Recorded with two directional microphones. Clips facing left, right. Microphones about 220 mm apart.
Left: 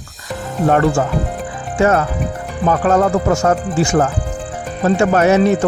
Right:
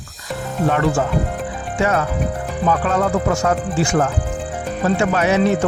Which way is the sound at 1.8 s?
45° left (ahead or behind).